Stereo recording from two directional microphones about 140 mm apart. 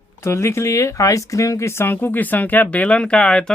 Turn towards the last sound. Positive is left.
turn(degrees=5)  # may be behind; listen again after turning